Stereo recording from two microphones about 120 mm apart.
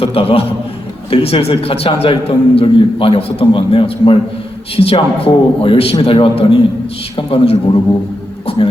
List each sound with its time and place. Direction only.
0.0 s a man's voice: 55° left (ahead or behind)